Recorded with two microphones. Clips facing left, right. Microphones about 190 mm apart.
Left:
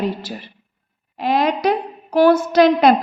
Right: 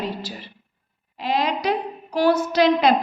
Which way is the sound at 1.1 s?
55° left (ahead or behind).